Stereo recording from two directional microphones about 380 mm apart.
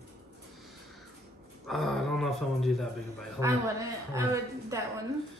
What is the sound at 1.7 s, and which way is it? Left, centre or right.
Speech, centre.